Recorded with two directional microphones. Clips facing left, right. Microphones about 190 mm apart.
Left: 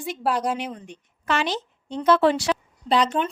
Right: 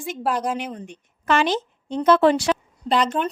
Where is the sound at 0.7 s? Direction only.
50° right (ahead or behind).